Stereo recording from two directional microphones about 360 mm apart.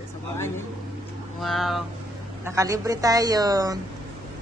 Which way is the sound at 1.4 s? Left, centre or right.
Centre.